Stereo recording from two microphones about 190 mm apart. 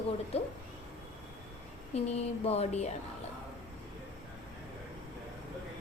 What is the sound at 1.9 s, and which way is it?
Speech, 35° left (ahead or behind).